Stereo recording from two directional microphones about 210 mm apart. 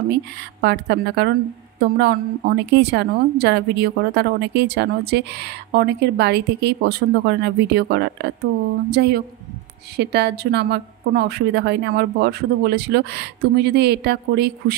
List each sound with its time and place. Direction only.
0.1 s a woman's voice: 50° right (ahead or behind)